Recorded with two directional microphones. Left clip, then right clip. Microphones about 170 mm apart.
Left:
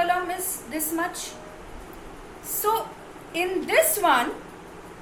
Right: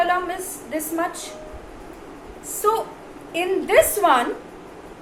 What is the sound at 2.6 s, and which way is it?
A woman's voice, 20° left (ahead or behind).